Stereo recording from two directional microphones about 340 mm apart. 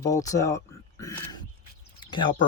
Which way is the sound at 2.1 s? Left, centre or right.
Centre.